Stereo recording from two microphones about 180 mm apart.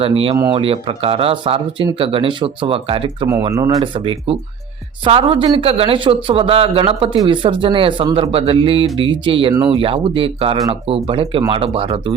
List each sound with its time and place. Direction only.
0.0 s speech: 30° right (ahead or behind)
3.5 s speech: 20° right (ahead or behind)